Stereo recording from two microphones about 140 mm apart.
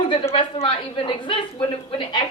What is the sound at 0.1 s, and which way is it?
A woman's voice, 40° left (ahead or behind).